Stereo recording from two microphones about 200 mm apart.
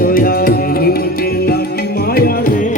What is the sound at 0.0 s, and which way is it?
Music, 45° left (ahead or behind).